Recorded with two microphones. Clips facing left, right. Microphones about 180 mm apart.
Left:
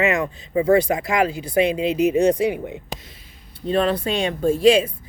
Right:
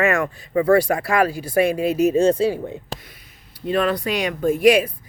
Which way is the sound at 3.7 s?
30° left (ahead or behind).